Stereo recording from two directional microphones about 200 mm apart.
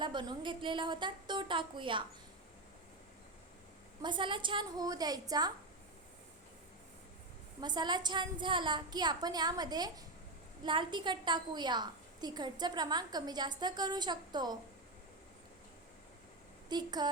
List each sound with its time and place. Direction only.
0.0 s a woman's voice: 20° right (ahead or behind)
4.0 s a woman's voice: 25° right (ahead or behind)
7.6 s a woman's voice: 20° right (ahead or behind)
16.6 s a woman's voice: 20° right (ahead or behind)